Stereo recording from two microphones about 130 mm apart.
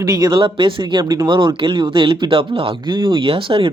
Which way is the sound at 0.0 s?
30° right (ahead or behind).